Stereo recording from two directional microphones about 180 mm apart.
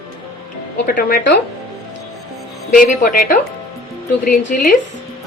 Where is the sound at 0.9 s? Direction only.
55° left (ahead or behind).